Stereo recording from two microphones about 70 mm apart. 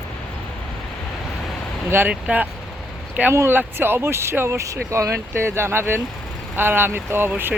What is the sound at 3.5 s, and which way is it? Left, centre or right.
Speech, right.